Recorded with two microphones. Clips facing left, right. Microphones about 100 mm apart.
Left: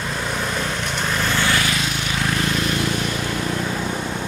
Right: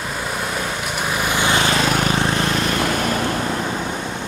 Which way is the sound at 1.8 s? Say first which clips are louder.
Right 7 dB; 50° right (ahead or behind).